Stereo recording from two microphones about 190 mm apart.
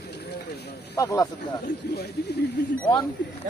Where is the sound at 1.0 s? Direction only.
20° left (ahead or behind).